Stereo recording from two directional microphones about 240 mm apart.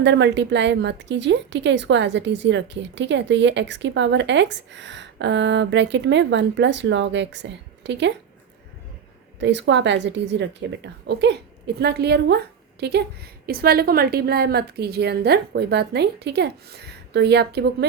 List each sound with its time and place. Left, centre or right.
0.0 s a woman's voice: right
9.4 s a woman's voice: right